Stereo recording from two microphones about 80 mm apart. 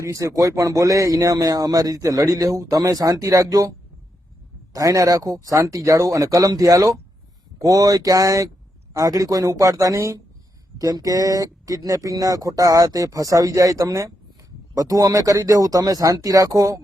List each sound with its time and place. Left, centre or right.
0.0 s speech: right
10.8 s speech: right